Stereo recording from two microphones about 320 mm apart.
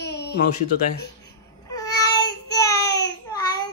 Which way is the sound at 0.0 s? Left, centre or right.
Left.